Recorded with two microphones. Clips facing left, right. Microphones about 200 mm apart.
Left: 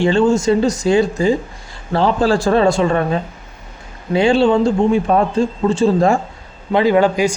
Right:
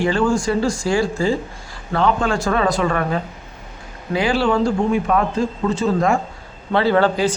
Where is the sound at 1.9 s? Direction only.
30° left (ahead or behind).